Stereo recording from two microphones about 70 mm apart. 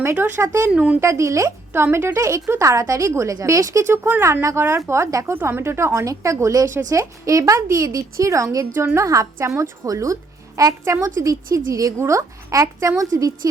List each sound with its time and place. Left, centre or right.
0.0 s speech: right
0.7 s speech: centre
0.9 s a woman's voice: right
1.7 s speech: right
2.1 s a woman's voice: right